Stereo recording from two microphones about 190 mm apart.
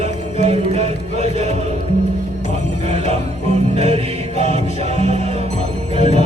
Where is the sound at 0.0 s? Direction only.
35° right (ahead or behind).